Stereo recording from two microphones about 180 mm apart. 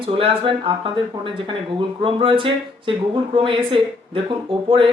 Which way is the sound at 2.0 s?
30° right (ahead or behind).